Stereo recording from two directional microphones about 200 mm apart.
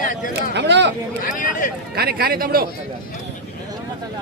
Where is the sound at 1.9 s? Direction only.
50° right (ahead or behind).